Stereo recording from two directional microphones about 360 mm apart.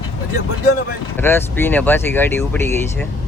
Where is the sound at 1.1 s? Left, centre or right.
Centre.